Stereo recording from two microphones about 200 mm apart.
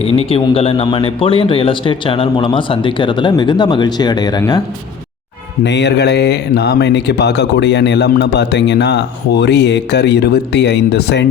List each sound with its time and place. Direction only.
0.2 s speech: 30° left (ahead or behind)
5.6 s speech: 60° left (ahead or behind)